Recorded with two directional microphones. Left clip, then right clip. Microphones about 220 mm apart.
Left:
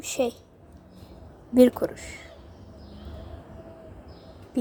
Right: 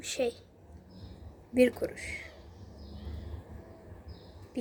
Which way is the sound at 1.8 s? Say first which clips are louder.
Left 6 dB; centre (ahead or behind).